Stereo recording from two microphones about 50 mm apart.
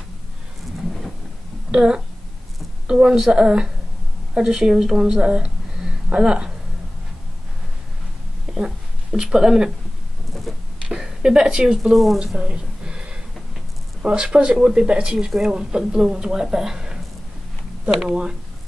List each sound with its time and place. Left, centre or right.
1.7 s a woman's voice: centre
8.5 s speech: centre
10.5 s a sound: centre
10.9 s speech: centre
12.4 s a sound: centre
14.0 s speech: centre